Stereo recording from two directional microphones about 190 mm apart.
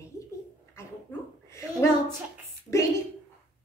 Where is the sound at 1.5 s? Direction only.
15° left (ahead or behind).